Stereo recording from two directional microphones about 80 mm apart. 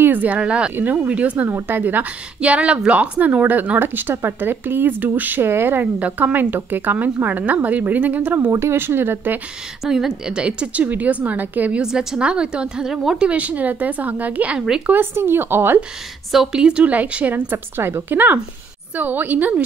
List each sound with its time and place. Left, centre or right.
0.0 s a woman's voice: right
8.5 s a woman's voice: right
9.8 s a woman's voice: centre
11.8 s a woman's voice: centre; by 15.8 s right
16.3 s a woman's voice: centre